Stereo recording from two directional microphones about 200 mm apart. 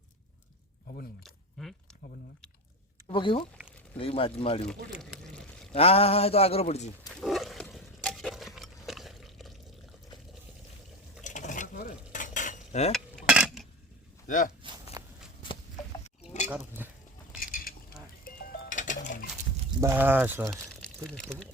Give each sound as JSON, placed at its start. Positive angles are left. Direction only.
{"t": 1.2, "sound": "a sound", "side_deg": 0}
{"t": 3.1, "sound": "speech", "side_deg": 25}
{"t": 4.6, "sound": "pour", "side_deg": 5}
{"t": 5.7, "sound": "speech", "side_deg": 30}
{"t": 7.1, "sound": "a sound", "side_deg": 0}
{"t": 11.2, "sound": "cutlery", "side_deg": 40}
{"t": 12.9, "sound": "cutlery", "side_deg": 0}
{"t": 14.3, "sound": "speech", "side_deg": 40}
{"t": 15.0, "sound": "shuffling cards", "side_deg": -15}
{"t": 16.5, "sound": "speech", "side_deg": -10}
{"t": 17.4, "sound": "a sound", "side_deg": 45}
{"t": 18.3, "sound": "music", "side_deg": 45}
{"t": 19.8, "sound": "speech", "side_deg": -10}
{"t": 21.1, "sound": "speech", "side_deg": 5}